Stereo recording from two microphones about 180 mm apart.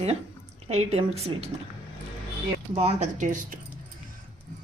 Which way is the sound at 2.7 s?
40° right (ahead or behind).